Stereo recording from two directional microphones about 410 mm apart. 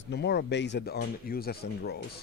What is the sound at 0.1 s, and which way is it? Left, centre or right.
Speech, left.